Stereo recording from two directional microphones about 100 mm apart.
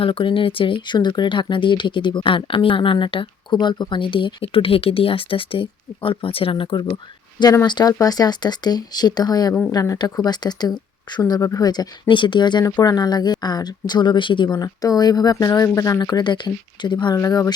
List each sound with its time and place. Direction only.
0.0 s speech: 60° left (ahead or behind)
17.2 s speech: 35° left (ahead or behind)